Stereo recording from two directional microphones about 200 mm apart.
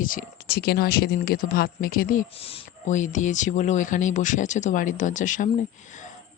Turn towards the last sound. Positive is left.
turn(degrees=40)  # may be behind; listen again after turning